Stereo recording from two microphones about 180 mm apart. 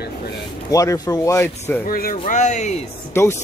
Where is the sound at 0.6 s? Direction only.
20° left (ahead or behind).